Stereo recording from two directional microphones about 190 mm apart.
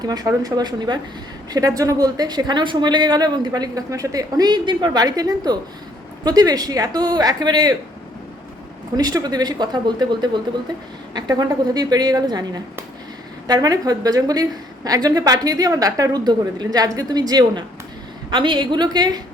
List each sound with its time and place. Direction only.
0.0 s a woman's voice: 20° right (ahead or behind)
9.0 s a woman's voice: 20° right (ahead or behind)